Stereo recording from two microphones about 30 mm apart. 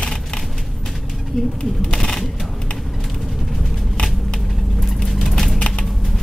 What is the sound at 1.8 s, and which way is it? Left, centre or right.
Speech, left.